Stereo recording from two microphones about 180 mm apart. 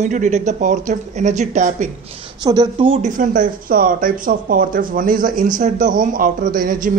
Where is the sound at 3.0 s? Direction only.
45° right (ahead or behind).